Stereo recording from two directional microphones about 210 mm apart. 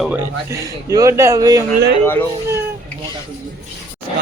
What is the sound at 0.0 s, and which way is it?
Speech, 10° right (ahead or behind).